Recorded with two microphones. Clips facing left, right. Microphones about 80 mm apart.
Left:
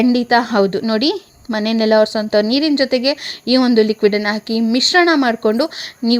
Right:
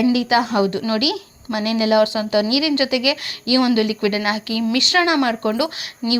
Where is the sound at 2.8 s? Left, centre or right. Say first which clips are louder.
Left 4 dB; left.